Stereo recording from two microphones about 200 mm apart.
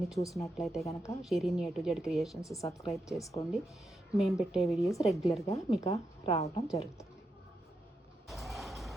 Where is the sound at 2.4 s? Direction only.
15° left (ahead or behind).